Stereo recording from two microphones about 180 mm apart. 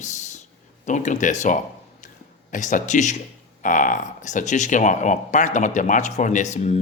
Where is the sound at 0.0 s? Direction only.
40° left (ahead or behind).